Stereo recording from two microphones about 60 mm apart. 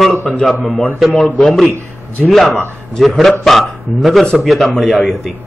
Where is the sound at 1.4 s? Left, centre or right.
Centre.